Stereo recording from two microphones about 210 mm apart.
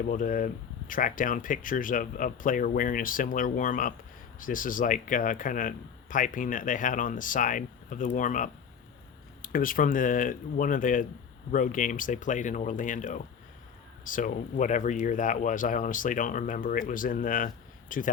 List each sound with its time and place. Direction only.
0.0 s speech: 40° left (ahead or behind)